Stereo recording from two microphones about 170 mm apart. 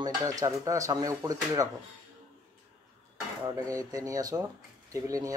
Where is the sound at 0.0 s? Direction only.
20° right (ahead or behind).